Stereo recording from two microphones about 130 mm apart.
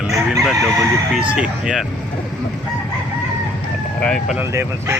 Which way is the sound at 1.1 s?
5° right (ahead or behind).